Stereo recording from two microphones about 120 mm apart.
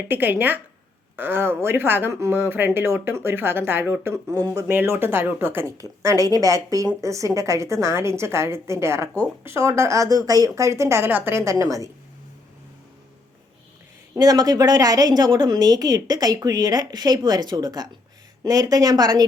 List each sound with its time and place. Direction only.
0.1 s speech: 15° right (ahead or behind)
14.2 s a woman's voice: 30° right (ahead or behind)